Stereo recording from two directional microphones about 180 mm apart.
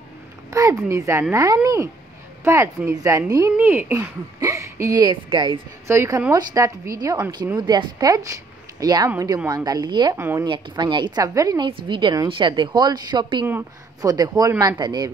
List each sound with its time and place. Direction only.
0.5 s a woman's voice: 15° right (ahead or behind)
10.1 s speech: 15° right (ahead or behind)
10.4 s a woman's voice: 25° right (ahead or behind)